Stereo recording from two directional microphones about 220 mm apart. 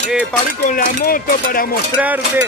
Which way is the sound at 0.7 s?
40° left (ahead or behind).